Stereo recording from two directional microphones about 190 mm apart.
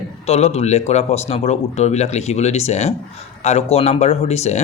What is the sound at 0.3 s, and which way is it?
Speech, 35° left (ahead or behind).